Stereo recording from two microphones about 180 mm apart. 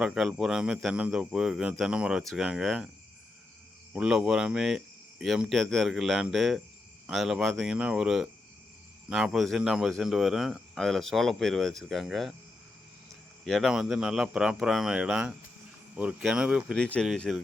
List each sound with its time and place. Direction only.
0.0 s speech: centre (ahead or behind)
3.9 s speech: 5° right (ahead or behind)
13.4 s speech: centre (ahead or behind)